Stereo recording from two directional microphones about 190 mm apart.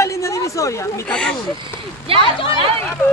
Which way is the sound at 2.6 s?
30° right (ahead or behind).